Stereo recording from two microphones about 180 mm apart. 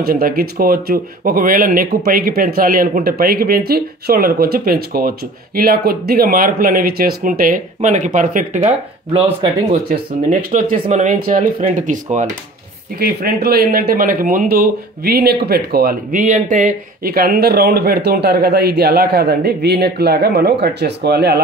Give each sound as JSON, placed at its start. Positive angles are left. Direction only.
{"t": 0.0, "sound": "speech", "side_deg": -55}
{"t": 9.1, "sound": "speech", "side_deg": -30}
{"t": 9.8, "sound": "speech", "side_deg": -50}
{"t": 13.0, "sound": "speech", "side_deg": -55}